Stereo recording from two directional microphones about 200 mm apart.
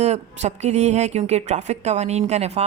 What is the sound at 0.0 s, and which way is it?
Speech, 35° right (ahead or behind).